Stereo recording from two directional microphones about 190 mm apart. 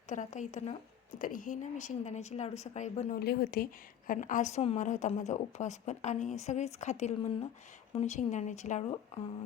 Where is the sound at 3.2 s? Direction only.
55° left (ahead or behind).